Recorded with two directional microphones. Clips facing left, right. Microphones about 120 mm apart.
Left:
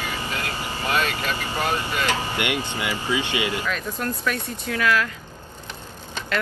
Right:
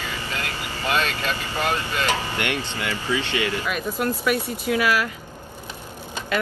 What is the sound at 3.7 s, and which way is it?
Speech, 10° right (ahead or behind).